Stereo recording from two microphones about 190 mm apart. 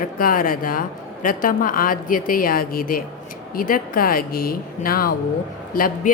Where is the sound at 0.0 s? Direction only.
45° left (ahead or behind).